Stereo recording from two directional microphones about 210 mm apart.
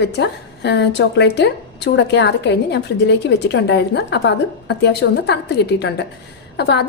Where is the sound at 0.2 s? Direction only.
55° left (ahead or behind).